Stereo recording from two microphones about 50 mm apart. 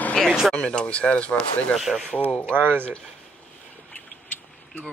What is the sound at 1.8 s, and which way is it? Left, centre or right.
Speech, centre.